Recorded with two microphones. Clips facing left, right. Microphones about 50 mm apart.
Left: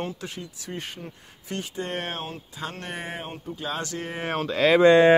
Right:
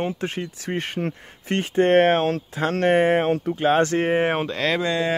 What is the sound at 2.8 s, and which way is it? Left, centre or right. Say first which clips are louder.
Speech: right 17 dB; right.